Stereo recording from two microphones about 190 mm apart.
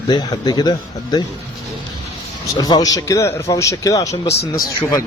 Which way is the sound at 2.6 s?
20° left (ahead or behind).